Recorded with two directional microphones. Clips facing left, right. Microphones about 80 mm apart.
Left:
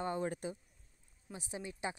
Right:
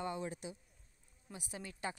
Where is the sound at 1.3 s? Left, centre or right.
Left.